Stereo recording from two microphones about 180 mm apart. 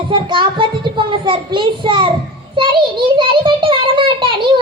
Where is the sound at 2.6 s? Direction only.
25° right (ahead or behind).